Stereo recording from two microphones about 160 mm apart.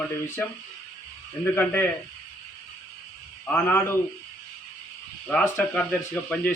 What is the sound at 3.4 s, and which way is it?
Speech, 15° left (ahead or behind).